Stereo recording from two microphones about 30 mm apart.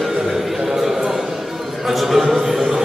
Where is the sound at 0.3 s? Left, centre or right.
Centre.